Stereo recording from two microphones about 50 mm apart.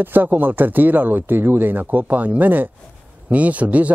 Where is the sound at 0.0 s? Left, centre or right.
Right.